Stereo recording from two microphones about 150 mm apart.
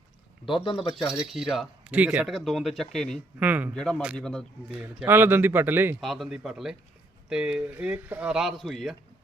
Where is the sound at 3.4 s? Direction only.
10° right (ahead or behind).